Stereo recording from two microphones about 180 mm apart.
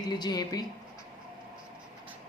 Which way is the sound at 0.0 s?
25° left (ahead or behind).